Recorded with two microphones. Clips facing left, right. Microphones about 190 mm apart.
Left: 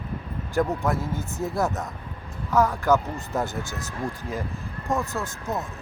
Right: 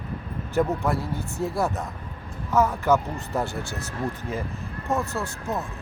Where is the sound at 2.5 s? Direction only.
Centre (ahead or behind).